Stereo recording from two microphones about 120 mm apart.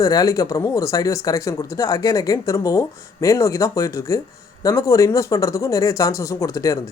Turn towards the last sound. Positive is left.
turn(degrees=30)  # may be behind; listen again after turning